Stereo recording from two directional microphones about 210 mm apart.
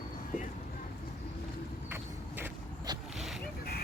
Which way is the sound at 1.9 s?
10° right (ahead or behind).